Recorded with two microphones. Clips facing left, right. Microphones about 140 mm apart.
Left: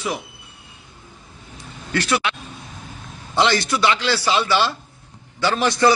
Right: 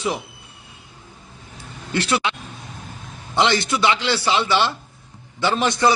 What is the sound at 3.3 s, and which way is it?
A man's voice, 20° right (ahead or behind).